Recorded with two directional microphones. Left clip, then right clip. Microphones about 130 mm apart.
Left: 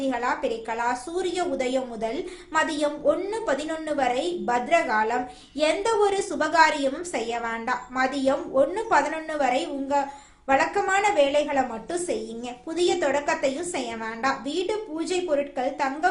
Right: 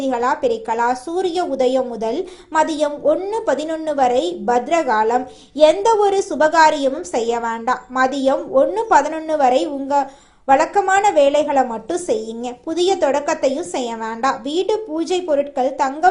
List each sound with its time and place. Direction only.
0.0 s a woman's voice: 40° right (ahead or behind)